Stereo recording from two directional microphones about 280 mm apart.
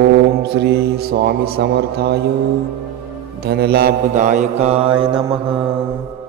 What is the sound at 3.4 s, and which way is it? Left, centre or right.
Mantra, right.